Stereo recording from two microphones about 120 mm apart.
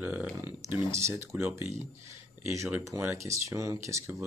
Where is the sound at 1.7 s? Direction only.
25° right (ahead or behind).